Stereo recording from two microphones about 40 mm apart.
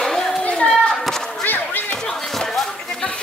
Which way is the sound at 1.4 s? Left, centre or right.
Left.